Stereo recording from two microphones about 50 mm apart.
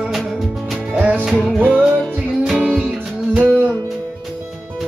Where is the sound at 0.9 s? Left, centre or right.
Right.